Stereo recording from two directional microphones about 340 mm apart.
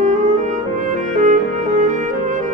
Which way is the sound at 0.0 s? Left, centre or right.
Right.